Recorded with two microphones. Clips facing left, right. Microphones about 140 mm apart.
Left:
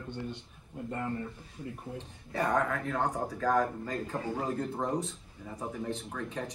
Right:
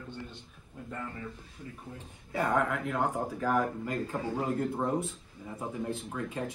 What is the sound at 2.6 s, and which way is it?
Speech, 15° right (ahead or behind).